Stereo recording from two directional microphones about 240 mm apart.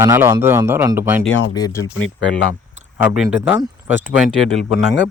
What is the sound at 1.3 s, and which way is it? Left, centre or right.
Speech, left.